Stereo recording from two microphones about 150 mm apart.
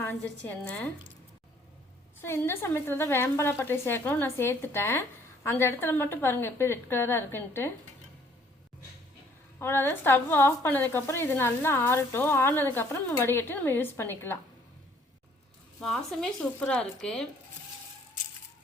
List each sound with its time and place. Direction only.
0.0 s a woman's voice: 10° left (ahead or behind)
2.2 s a woman's voice: 15° left (ahead or behind)
9.6 s a woman's voice: 15° left (ahead or behind)
15.8 s speech: 5° left (ahead or behind)